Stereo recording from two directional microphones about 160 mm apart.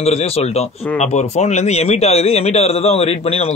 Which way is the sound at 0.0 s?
40° left (ahead or behind).